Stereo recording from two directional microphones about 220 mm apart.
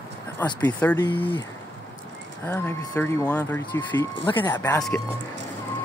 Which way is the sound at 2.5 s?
10° left (ahead or behind).